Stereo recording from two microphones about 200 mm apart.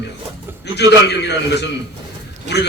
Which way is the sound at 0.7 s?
55° left (ahead or behind).